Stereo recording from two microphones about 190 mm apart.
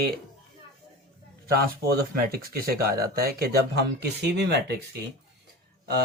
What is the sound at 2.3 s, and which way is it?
Speech, 50° right (ahead or behind).